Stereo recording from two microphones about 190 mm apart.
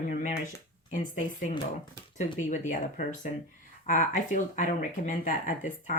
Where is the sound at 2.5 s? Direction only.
40° left (ahead or behind).